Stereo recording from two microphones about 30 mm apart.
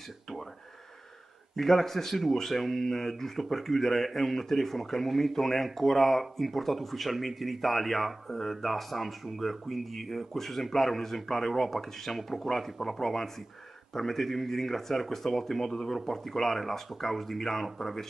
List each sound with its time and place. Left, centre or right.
1.6 s speech: centre